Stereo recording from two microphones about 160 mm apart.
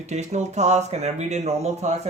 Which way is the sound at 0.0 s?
45° right (ahead or behind).